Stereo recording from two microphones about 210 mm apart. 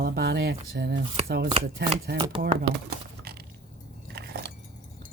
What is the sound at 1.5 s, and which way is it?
Chopping, 25° right (ahead or behind).